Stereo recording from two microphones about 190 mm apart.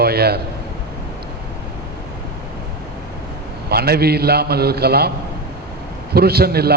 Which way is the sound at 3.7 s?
55° right (ahead or behind).